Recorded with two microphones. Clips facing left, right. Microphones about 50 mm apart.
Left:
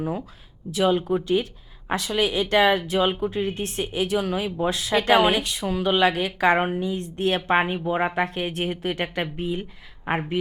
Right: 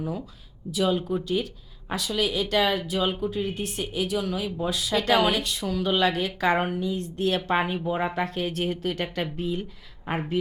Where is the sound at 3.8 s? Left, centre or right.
Left.